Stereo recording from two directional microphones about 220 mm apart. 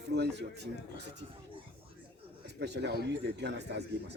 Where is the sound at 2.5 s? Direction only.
50° right (ahead or behind).